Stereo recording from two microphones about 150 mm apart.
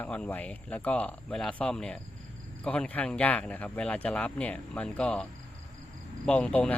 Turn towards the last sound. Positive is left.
turn(degrees=10)  # may be behind; listen again after turning